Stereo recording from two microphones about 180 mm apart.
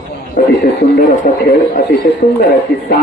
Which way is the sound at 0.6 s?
55° left (ahead or behind).